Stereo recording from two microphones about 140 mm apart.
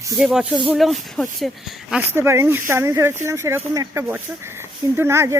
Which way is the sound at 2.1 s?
20° right (ahead or behind).